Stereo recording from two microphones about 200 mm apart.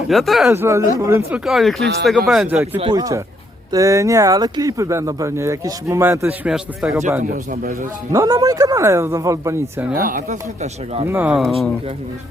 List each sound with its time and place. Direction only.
0.1 s speech: centre (ahead or behind)
0.5 s speech: 15° right (ahead or behind)
1.5 s speech: centre (ahead or behind)
1.8 s speech: 55° right (ahead or behind)
2.0 s speech: centre (ahead or behind)
2.7 s speech: 25° right (ahead or behind); by 7.0 s 5° right (ahead or behind)
7.5 s speech: 45° right (ahead or behind)
8.1 s speech: 15° right (ahead or behind)
10.0 s speech: 40° right (ahead or behind)
11.0 s speech: 10° right (ahead or behind)